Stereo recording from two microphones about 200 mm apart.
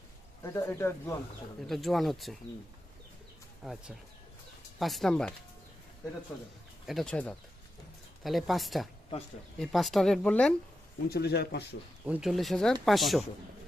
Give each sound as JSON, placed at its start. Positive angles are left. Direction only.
{"t": 0.4, "sound": "speech", "side_deg": 15}
{"t": 1.6, "sound": "speech", "side_deg": 0}
{"t": 3.6, "sound": "speech", "side_deg": 0}
{"t": 6.8, "sound": "speech", "side_deg": 0}
{"t": 11.1, "sound": "speech", "side_deg": 55}
{"t": 12.0, "sound": "speech", "side_deg": -5}